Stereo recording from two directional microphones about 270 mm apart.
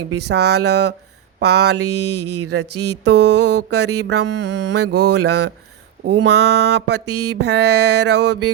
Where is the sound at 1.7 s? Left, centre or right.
Right.